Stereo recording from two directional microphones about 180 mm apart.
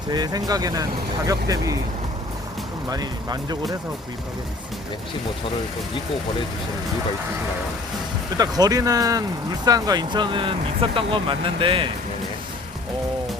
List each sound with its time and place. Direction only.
0.1 s speech: 20° right (ahead or behind)
2.9 s speech: 20° right (ahead or behind)
8.4 s speech: 20° right (ahead or behind)